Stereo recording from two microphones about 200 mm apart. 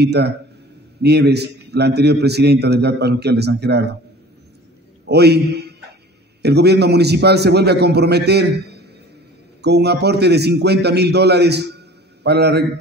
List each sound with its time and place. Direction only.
0.0 s a man's voice: 55° right (ahead or behind)
5.0 s a man's voice: 55° right (ahead or behind)